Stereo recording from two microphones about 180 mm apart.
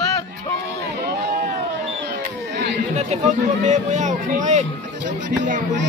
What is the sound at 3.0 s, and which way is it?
Speech, 40° right (ahead or behind).